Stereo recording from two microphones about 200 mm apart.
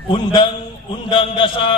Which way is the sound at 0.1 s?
20° left (ahead or behind).